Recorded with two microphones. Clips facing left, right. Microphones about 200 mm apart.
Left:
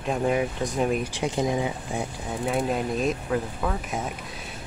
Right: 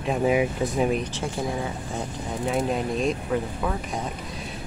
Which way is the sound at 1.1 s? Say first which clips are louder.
Left 3 dB; 20° left (ahead or behind).